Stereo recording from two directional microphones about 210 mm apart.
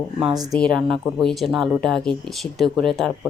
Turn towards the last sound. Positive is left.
turn(degrees=0)  # may be behind; listen again after turning